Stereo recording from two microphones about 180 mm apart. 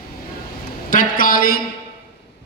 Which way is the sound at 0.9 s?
50° left (ahead or behind).